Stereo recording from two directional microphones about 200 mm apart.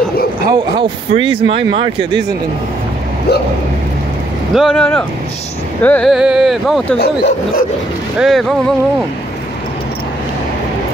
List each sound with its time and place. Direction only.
0.5 s speech: 25° right (ahead or behind)
4.6 s speech: centre (ahead or behind)
7.0 s speech: 55° left (ahead or behind)
8.2 s speech: centre (ahead or behind)